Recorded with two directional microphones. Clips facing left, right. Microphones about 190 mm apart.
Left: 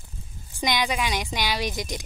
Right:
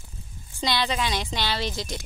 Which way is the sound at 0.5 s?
15° left (ahead or behind).